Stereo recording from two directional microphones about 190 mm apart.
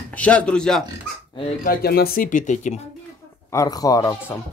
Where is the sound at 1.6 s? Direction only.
50° left (ahead or behind).